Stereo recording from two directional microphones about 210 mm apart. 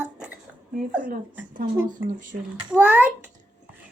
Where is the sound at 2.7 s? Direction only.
10° right (ahead or behind).